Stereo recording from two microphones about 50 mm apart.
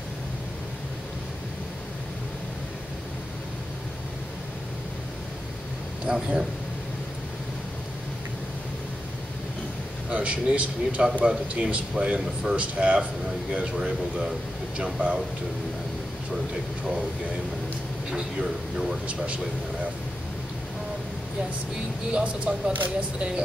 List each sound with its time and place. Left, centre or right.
6.0 s speech: centre
10.0 s a man's voice: right
18.1 s speech: centre
19.0 s a man's voice: right
22.1 s a man's voice: right